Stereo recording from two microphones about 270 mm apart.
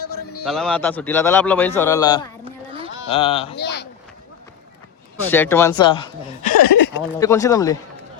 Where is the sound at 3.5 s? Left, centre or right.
Left.